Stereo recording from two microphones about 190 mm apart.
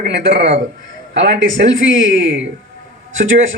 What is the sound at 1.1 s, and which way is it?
Speech, 75° right (ahead or behind).